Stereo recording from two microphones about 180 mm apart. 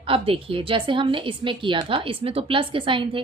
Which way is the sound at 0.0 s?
30° right (ahead or behind).